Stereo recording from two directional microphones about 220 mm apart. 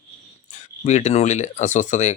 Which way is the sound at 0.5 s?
30° left (ahead or behind).